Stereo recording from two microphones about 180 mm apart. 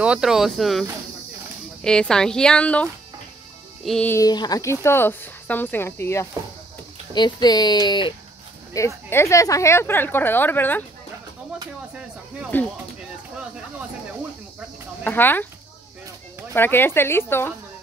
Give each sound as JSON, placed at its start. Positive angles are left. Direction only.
{"t": 0.0, "sound": "speech", "side_deg": -5}
{"t": 4.1, "sound": "speech", "side_deg": 20}
{"t": 7.2, "sound": "speech", "side_deg": 25}
{"t": 12.5, "sound": "speech", "side_deg": 10}
{"t": 13.4, "sound": "a sound", "side_deg": -5}
{"t": 15.0, "sound": "speech", "side_deg": 10}
{"t": 16.5, "sound": "speech", "side_deg": 10}